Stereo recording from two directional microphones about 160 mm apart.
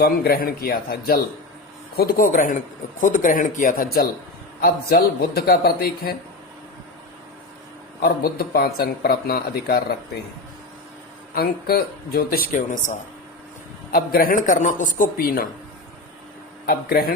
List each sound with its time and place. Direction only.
0.0 s speech: 75° left (ahead or behind)
8.0 s speech: 70° left (ahead or behind)
11.3 s speech: 70° left (ahead or behind); by 12.9 s 55° left (ahead or behind)
13.9 s speech: 65° left (ahead or behind)
16.6 s speech: 65° left (ahead or behind)